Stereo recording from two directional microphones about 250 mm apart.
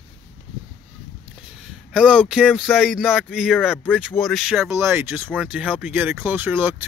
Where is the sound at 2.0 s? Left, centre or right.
Centre.